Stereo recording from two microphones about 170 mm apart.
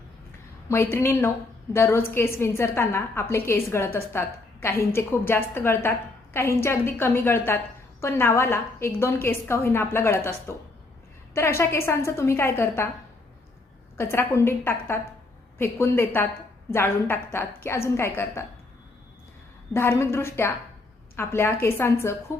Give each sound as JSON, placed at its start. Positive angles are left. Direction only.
{"t": 0.7, "sound": "a woman's voice", "side_deg": 15}
{"t": 13.9, "sound": "a woman's voice", "side_deg": 15}
{"t": 19.7, "sound": "a woman's voice", "side_deg": 15}